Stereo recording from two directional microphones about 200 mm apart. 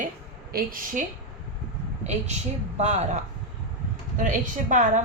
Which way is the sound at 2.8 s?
35° right (ahead or behind).